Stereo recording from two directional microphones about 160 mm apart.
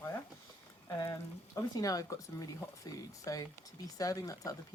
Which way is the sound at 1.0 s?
20° left (ahead or behind).